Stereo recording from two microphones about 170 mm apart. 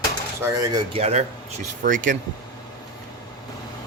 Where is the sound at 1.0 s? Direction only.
40° right (ahead or behind).